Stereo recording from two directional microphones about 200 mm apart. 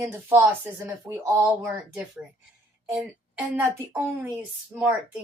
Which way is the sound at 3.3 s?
5° right (ahead or behind).